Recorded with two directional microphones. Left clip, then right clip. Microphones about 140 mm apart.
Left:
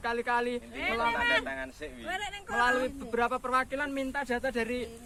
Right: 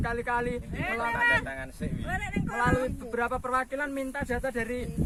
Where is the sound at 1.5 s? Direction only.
45° right (ahead or behind).